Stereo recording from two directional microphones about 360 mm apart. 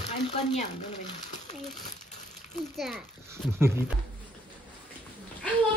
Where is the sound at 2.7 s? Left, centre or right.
Centre.